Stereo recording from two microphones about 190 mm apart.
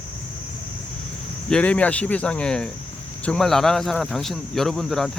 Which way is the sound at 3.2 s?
5° left (ahead or behind).